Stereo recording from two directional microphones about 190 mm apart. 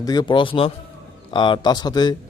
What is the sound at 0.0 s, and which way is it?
A man's voice, 20° left (ahead or behind).